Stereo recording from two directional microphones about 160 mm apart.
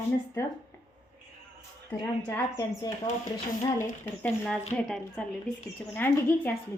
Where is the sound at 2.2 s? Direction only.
15° left (ahead or behind).